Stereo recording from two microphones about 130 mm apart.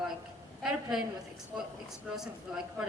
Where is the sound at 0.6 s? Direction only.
5° right (ahead or behind).